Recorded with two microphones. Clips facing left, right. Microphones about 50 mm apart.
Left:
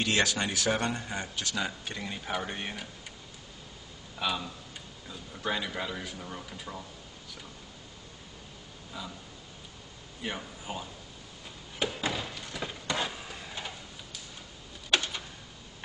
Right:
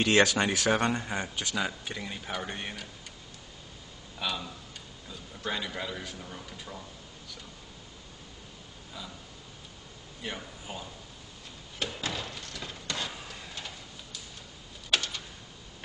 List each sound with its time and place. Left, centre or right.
0.0 s speech: right
1.7 s speech: centre
4.2 s a man's voice: centre
10.2 s speech: centre
11.8 s a sound: centre